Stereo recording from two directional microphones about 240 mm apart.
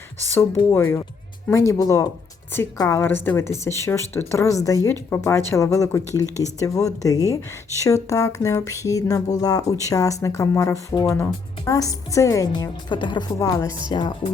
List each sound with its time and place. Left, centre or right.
0.7 s speech: centre